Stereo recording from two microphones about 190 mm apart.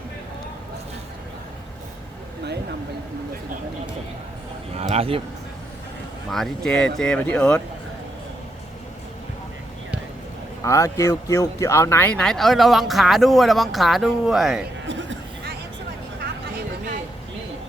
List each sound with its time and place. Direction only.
4.7 s speech: 35° right (ahead or behind)
6.3 s speech: centre (ahead or behind)
10.6 s speech: 15° left (ahead or behind); by 14.6 s centre (ahead or behind)